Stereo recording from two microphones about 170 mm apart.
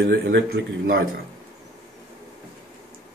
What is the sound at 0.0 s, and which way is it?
Speech, 85° right.